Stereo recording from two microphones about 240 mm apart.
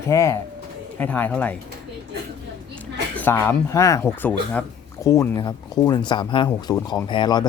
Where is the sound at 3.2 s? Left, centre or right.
Centre.